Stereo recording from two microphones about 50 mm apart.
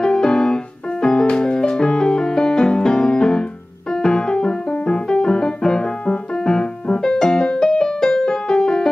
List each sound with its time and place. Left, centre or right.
0.0 s music: centre